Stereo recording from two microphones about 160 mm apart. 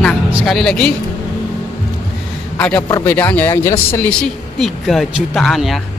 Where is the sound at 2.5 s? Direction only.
10° left (ahead or behind).